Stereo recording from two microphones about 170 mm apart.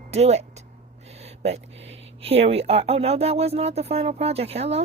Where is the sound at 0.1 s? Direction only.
40° right (ahead or behind).